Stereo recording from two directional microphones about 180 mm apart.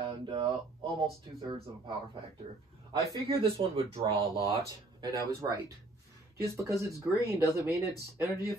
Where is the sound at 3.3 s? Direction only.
30° right (ahead or behind).